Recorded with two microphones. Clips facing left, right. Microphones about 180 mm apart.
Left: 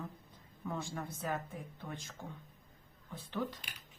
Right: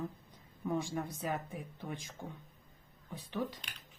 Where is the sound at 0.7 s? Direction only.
15° right (ahead or behind).